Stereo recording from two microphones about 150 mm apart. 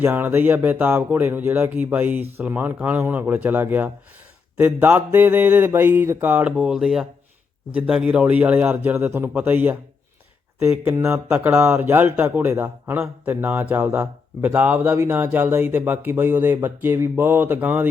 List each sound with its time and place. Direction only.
0.0 s speech: 10° right (ahead or behind)